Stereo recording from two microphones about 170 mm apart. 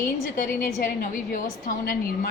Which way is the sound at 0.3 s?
55° left (ahead or behind).